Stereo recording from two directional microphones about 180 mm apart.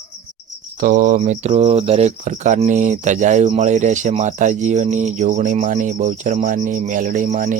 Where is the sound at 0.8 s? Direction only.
45° right (ahead or behind).